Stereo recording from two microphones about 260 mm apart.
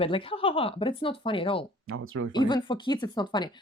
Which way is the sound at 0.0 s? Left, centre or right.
Left.